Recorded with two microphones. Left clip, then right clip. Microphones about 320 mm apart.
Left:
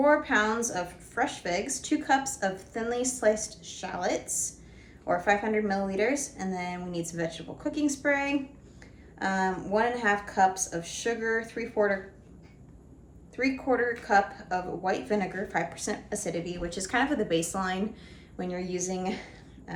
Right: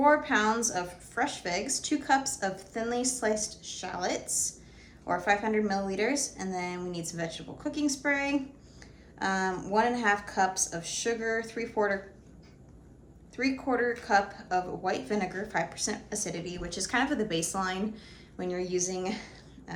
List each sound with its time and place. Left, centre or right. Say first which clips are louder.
0.0 s a woman's voice: left 1 dB; centre
13.3 s a woman's voice: left 2 dB; centre